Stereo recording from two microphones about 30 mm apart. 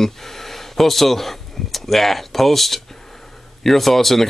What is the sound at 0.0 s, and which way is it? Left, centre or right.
Speech, centre.